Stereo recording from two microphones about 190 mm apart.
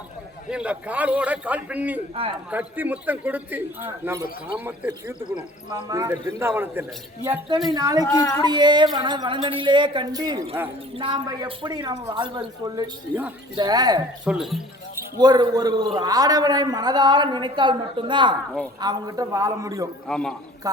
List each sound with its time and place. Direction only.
0.5 s a man's voice: 5° right (ahead or behind)
2.2 s a man's voice: 30° right (ahead or behind)
2.5 s a man's voice: 10° right (ahead or behind)
8.1 s speech: 15° left (ahead or behind)
8.4 s a man's voice: 20° right (ahead or behind)
14.3 s speech: centre (ahead or behind)
15.2 s a man's voice: 20° right (ahead or behind)
20.1 s speech: 5° left (ahead or behind)